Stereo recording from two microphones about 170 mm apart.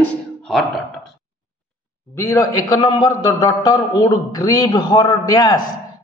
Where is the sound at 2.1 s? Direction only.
20° left (ahead or behind).